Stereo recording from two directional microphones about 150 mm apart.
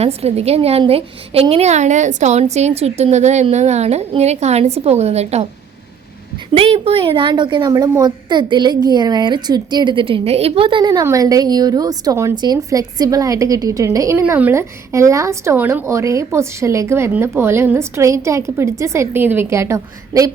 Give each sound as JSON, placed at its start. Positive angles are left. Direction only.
{"t": 0.0, "sound": "a woman's voice", "side_deg": -45}
{"t": 6.5, "sound": "a woman's voice", "side_deg": -35}